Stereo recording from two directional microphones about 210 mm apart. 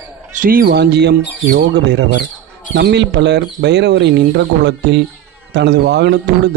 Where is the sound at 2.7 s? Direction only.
55° right (ahead or behind).